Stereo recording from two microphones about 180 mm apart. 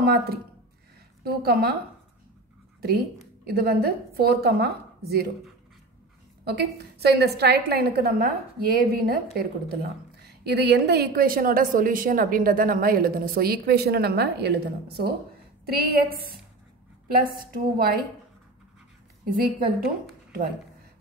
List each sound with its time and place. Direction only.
0.0 s a woman's voice: 60° right (ahead or behind)
3.4 s a woman's voice: 60° right (ahead or behind)
6.4 s a woman's voice: 65° right (ahead or behind)
19.3 s a woman's voice: 55° right (ahead or behind)